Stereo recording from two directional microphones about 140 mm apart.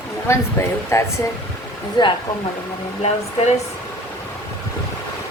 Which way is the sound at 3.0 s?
50° left (ahead or behind).